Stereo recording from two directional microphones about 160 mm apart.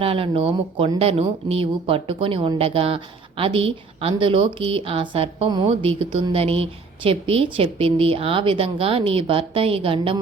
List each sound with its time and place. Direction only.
0.0 s speech: 35° right (ahead or behind)